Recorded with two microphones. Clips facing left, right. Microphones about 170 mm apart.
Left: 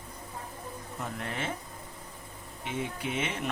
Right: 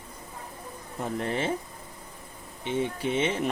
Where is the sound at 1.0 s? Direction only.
35° right (ahead or behind).